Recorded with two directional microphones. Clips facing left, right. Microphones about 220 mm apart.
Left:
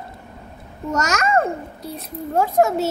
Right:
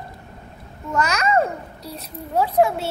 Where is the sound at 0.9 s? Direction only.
45° left (ahead or behind).